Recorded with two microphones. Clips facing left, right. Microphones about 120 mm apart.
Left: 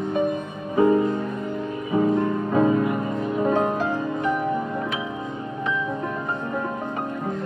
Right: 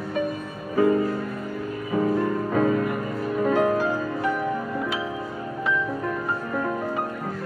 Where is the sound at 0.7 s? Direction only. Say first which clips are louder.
Left 2 dB; 20° left (ahead or behind).